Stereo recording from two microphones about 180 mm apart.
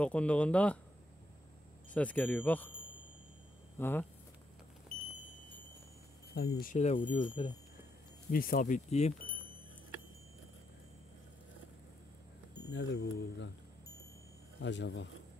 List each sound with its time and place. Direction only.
0.0 s speech: 5° left (ahead or behind)
2.0 s speech: 10° left (ahead or behind)
3.7 s speech: 10° left (ahead or behind)
6.3 s speech: 65° left (ahead or behind)
6.7 s speech: 45° left (ahead or behind)
7.2 s speech: 30° left (ahead or behind)
8.3 s speech: 55° left (ahead or behind)
12.6 s speech: 70° left (ahead or behind)
14.6 s speech: 80° left